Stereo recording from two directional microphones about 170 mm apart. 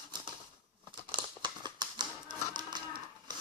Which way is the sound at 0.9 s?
30° right (ahead or behind).